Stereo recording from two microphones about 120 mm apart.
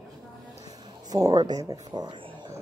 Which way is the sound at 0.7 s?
30° right (ahead or behind).